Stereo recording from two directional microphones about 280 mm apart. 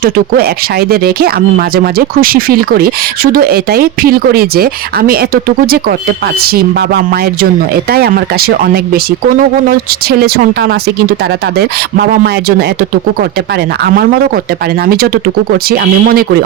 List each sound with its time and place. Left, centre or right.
0.0 s speech: right
13.8 s speech: right